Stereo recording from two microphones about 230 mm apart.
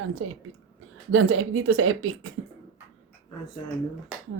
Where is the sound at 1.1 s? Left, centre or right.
Right.